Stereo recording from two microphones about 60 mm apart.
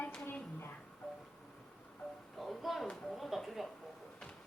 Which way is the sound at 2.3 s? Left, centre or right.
Centre.